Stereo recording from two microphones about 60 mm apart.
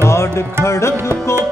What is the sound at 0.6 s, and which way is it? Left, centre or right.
Tabla, left.